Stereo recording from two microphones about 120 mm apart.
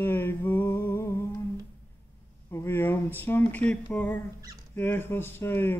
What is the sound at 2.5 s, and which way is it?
Speech, 20° left (ahead or behind).